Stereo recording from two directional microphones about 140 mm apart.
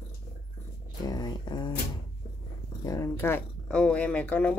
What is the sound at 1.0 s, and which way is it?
Speech, 30° left (ahead or behind).